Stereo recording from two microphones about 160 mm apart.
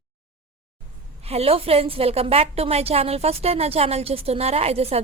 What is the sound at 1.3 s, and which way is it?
A woman's voice, 40° right (ahead or behind).